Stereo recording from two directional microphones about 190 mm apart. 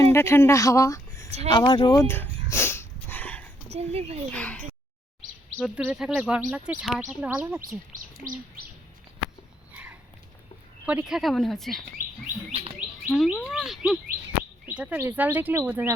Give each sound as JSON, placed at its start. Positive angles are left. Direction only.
{"t": 0.0, "sound": "speech", "side_deg": 15}
{"t": 1.5, "sound": "a sound", "side_deg": 25}
{"t": 3.7, "sound": "speech", "side_deg": -35}
{"t": 4.3, "sound": "speech", "side_deg": 5}
{"t": 5.5, "sound": "speech", "side_deg": -5}
{"t": 9.7, "sound": "a sound", "side_deg": -10}
{"t": 10.8, "sound": "speech", "side_deg": -5}
{"t": 13.1, "sound": "speech", "side_deg": 0}